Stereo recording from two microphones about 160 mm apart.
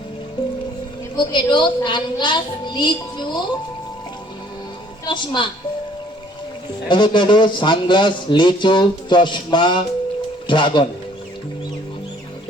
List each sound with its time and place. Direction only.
1.1 s speech: 30° left (ahead or behind)
5.0 s speech: 30° left (ahead or behind)
6.8 s speech: 30° left (ahead or behind)